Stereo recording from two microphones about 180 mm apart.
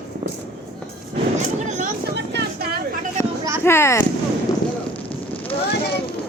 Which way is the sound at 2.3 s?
60° right (ahead or behind).